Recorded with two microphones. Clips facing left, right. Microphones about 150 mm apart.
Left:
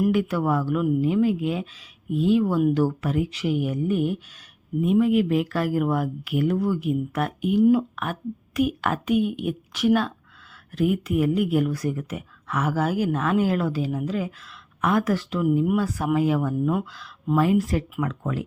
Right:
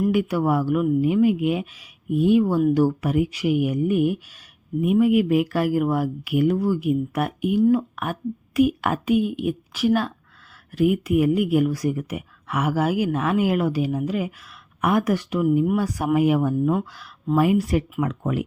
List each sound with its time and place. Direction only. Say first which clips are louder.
0.1 s speech: right 2 dB; 10° right (ahead or behind)
7.6 s speech: left 1 dB; 5° left (ahead or behind)
7.9 s speech: right 2 dB; 5° right (ahead or behind)